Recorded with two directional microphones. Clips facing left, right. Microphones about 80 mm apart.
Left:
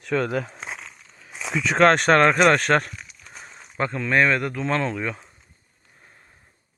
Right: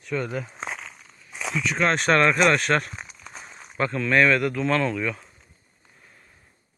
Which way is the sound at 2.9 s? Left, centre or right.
Right.